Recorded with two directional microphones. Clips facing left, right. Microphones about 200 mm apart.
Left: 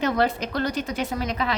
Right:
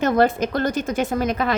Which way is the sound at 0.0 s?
50° right (ahead or behind).